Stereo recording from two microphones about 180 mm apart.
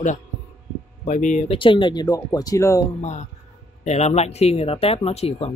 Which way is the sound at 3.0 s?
40° left (ahead or behind).